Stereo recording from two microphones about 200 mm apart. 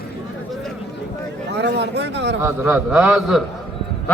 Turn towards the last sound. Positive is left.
turn(degrees=-5)  # may be behind; listen again after turning